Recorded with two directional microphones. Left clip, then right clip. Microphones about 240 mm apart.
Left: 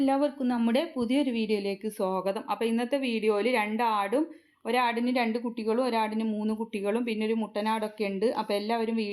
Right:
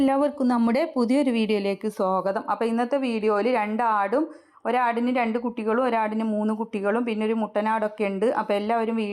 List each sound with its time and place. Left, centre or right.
0.0 s a woman's voice: right